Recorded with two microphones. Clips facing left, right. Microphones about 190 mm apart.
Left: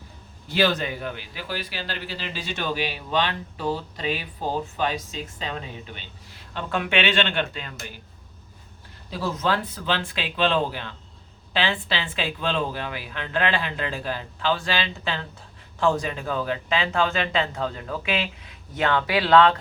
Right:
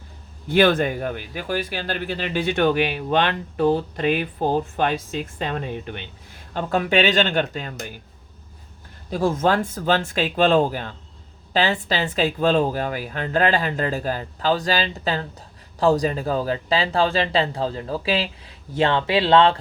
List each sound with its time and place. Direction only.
0.4 s a man's voice: 55° right (ahead or behind)
9.0 s speech: 50° right (ahead or behind); by 19.5 s 25° right (ahead or behind)